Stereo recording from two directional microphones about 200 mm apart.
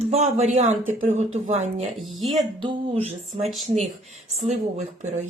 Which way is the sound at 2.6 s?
25° right (ahead or behind).